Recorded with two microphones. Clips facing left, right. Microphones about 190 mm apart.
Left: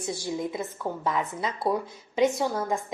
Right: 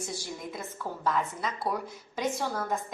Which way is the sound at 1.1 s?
25° left (ahead or behind).